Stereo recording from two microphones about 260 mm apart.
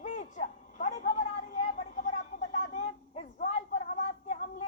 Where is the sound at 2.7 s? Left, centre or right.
Left.